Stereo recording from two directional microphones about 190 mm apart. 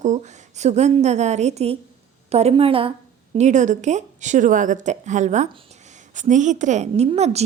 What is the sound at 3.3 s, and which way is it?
A woman's voice, 40° right (ahead or behind).